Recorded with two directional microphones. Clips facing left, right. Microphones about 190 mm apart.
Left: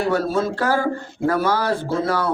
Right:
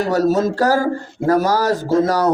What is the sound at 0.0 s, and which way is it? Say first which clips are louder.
A man's voice: right 4 dB; 40° right (ahead or behind).